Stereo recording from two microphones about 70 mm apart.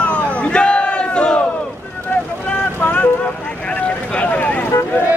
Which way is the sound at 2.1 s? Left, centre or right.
Centre.